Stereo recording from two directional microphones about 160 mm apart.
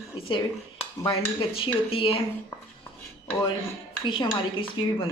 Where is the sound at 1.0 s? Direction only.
35° left (ahead or behind).